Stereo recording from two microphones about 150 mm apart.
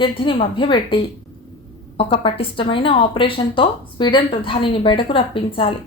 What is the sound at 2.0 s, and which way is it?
A woman's voice, 40° left (ahead or behind).